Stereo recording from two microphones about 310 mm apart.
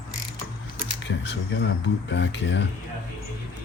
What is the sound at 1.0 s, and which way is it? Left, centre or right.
Speech, left.